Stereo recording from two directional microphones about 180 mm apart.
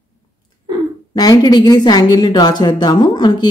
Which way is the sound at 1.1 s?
20° left (ahead or behind).